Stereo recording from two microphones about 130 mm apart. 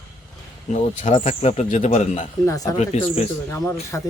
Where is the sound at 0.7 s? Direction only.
70° left (ahead or behind).